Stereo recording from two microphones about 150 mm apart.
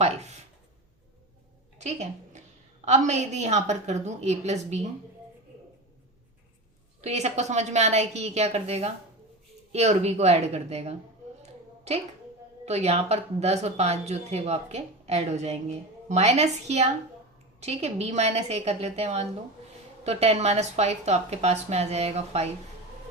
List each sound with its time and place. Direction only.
0.0 s a sound: 45° right (ahead or behind)
1.8 s a woman's voice: 50° right (ahead or behind)
7.0 s speech: 45° right (ahead or behind)
12.6 s speech: 45° right (ahead or behind)